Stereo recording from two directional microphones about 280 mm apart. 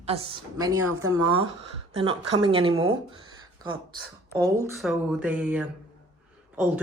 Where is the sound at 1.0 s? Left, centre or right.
Centre.